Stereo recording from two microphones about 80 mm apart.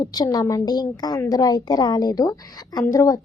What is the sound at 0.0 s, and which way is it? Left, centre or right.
A woman's voice, left.